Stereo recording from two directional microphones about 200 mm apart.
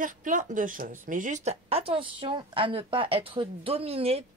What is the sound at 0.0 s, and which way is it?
Speech, 40° right (ahead or behind).